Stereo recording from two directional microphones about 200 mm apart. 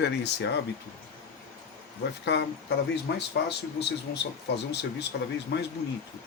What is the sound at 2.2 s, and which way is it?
Speech, 60° left (ahead or behind).